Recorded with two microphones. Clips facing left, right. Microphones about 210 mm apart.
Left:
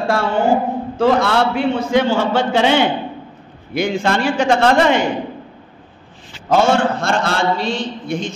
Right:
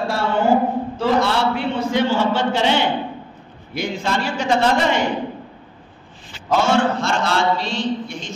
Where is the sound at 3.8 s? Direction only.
75° left (ahead or behind).